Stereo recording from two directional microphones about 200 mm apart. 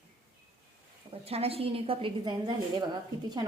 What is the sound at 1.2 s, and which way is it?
A woman's voice, 30° right (ahead or behind).